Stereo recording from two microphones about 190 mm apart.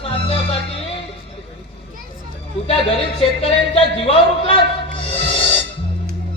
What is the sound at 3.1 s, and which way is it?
A man's voice, 30° left (ahead or behind).